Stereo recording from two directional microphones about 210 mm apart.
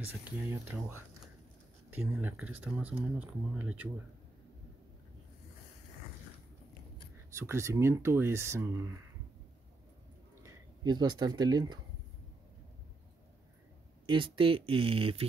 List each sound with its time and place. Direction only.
0.2 s speech: 10° right (ahead or behind)
7.0 s speech: 15° right (ahead or behind)
10.4 s speech: 20° right (ahead or behind)
14.0 s speech: 25° right (ahead or behind)